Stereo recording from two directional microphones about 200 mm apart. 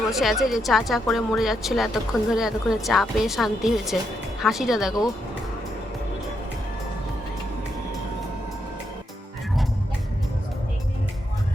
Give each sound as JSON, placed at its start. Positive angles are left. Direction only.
{"t": 0.1, "sound": "speech", "side_deg": 0}